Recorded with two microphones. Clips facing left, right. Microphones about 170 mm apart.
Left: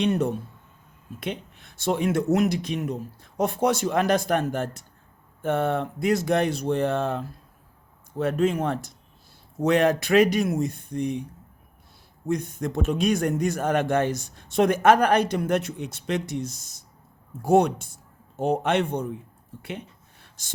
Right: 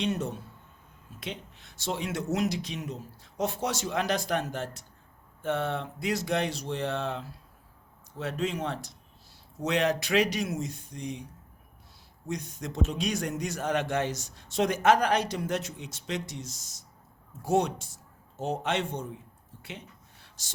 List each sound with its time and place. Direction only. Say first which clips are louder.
0.0 s a man's voice: left 7 dB; 60° left (ahead or behind)
12.3 s a man's voice: left 9 dB; 55° left (ahead or behind)
20.2 s gasp: left 2 dB; 55° left (ahead or behind)